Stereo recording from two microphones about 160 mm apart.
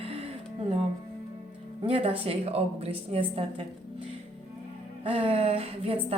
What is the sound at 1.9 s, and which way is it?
A woman's voice, 35° right (ahead or behind).